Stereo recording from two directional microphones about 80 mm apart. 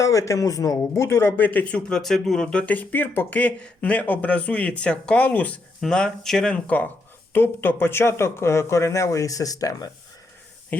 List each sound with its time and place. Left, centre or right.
0.0 s speech: left; by 2.0 s centre
2.0 s speech: centre; by 9.9 s left
10.7 s speech: left